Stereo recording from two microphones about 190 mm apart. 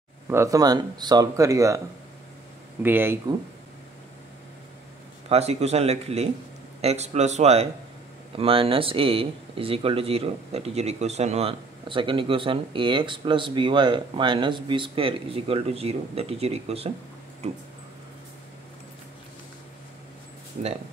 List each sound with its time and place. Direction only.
0.3 s speech: 15° right (ahead or behind)
2.8 s speech: 10° right (ahead or behind)
5.3 s speech: 35° right (ahead or behind)